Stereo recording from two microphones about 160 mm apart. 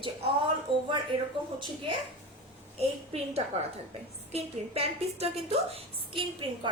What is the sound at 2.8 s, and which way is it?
A woman's voice, 45° right (ahead or behind).